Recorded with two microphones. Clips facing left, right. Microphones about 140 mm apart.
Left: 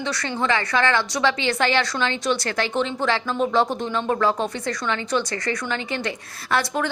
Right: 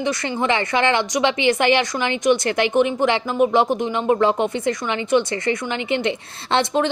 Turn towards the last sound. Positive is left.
turn(degrees=-20)  # may be behind; listen again after turning